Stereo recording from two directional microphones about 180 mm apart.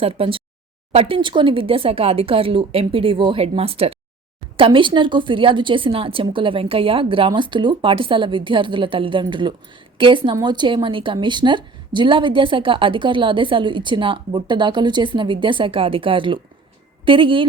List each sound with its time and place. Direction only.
0.0 s a woman's voice: 30° right (ahead or behind)